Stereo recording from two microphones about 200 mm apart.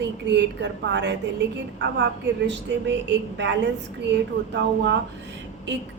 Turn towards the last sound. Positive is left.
turn(degrees=-60)  # may be behind; listen again after turning